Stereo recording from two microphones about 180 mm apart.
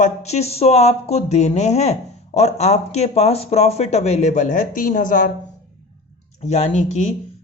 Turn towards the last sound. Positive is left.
turn(degrees=35)  # may be behind; listen again after turning